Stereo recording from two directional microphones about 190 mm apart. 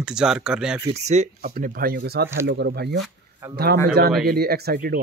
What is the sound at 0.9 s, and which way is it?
Speech, 35° right (ahead or behind).